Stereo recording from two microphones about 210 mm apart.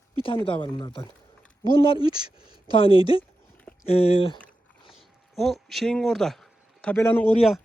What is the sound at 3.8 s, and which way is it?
Speech, 30° left (ahead or behind).